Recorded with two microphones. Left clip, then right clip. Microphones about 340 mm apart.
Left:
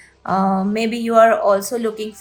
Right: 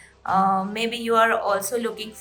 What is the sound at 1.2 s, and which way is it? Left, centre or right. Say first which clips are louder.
Speech: left 9 dB; centre.